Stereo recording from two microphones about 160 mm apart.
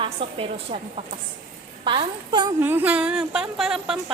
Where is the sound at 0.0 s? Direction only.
35° right (ahead or behind).